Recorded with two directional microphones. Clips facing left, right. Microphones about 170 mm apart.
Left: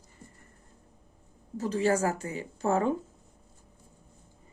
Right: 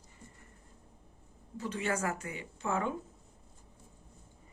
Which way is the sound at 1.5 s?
40° left (ahead or behind).